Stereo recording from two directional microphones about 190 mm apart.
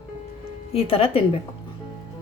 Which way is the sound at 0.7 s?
30° left (ahead or behind).